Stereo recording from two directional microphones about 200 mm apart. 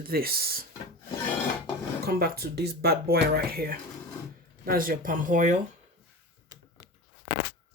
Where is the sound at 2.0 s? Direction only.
50° right (ahead or behind).